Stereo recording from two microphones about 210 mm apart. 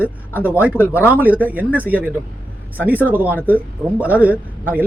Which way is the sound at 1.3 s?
10° right (ahead or behind).